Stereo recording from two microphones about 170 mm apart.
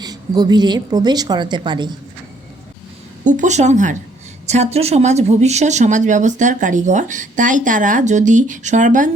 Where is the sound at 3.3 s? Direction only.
45° right (ahead or behind).